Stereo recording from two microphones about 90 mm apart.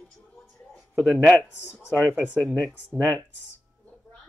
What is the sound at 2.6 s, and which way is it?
Speech, 15° left (ahead or behind).